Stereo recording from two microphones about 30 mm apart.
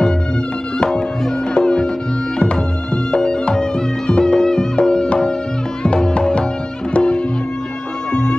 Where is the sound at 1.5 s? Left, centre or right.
Left.